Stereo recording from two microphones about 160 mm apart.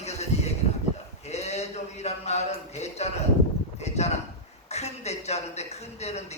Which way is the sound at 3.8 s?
45° left (ahead or behind).